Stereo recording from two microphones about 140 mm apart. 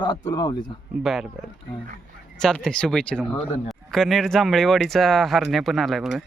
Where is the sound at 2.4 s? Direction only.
5° left (ahead or behind).